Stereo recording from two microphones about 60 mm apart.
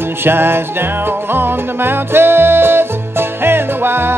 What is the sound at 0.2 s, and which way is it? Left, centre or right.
Music, right.